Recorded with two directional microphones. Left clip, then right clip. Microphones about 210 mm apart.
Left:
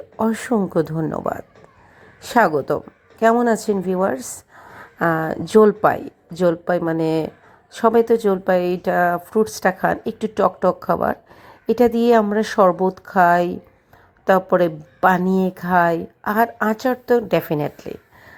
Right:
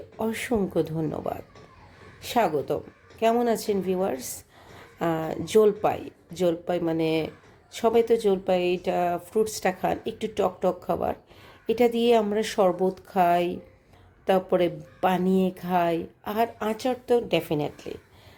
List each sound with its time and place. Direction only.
0.2 s speech: 20° left (ahead or behind)